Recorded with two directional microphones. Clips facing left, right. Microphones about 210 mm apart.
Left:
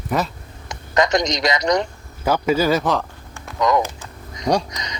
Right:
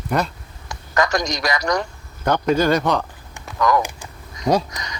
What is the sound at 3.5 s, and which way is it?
A man's voice, 20° left (ahead or behind).